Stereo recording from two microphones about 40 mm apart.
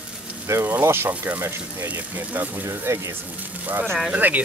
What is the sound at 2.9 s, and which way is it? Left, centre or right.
Speech, right.